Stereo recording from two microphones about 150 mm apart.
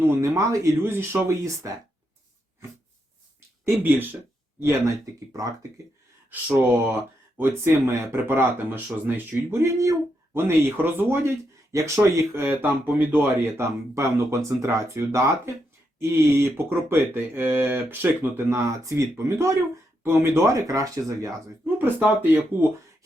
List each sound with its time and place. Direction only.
0.1 s speech: 20° right (ahead or behind)
3.6 s speech: 15° right (ahead or behind)
7.3 s speech: 15° right (ahead or behind)
21.8 s speech: 10° right (ahead or behind)